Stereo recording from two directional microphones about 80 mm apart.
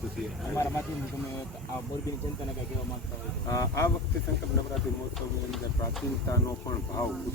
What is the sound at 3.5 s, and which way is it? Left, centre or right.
Speech, left.